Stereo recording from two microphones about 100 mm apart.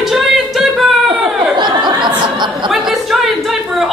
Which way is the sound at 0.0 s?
Centre (ahead or behind).